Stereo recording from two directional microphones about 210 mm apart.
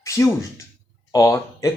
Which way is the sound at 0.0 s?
15° left (ahead or behind).